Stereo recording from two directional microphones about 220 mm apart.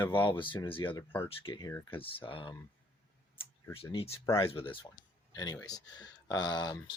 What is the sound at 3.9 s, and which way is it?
Speech, 25° left (ahead or behind).